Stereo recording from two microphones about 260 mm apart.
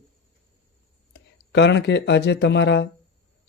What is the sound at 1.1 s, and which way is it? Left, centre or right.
Speech, left.